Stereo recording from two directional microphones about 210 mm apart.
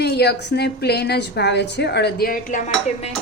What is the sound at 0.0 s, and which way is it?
A woman's voice, 50° left (ahead or behind).